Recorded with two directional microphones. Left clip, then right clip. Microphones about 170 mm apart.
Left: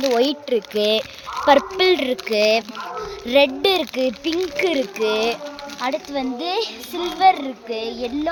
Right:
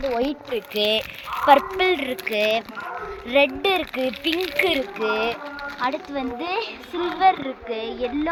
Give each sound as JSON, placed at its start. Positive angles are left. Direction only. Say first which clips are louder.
{"t": 0.2, "sound": "speech", "louder": "left 6 dB", "side_deg": 75}
{"t": 4.4, "sound": "speech", "louder": "left 1 dB", "side_deg": 65}
{"t": 5.8, "sound": "speech", "louder": "left 2 dB", "side_deg": 70}